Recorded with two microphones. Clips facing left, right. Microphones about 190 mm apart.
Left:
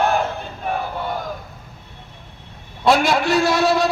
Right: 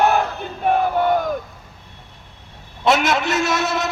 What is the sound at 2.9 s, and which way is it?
A man's voice, 20° right (ahead or behind).